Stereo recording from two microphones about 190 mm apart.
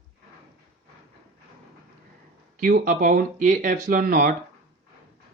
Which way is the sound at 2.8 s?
45° right (ahead or behind).